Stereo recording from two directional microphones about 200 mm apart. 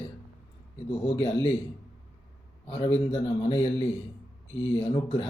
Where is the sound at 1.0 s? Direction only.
25° left (ahead or behind).